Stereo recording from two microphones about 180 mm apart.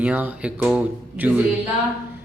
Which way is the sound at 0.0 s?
10° right (ahead or behind).